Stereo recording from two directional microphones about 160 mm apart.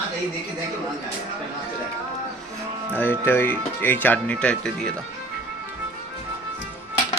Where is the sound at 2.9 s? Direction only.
15° left (ahead or behind).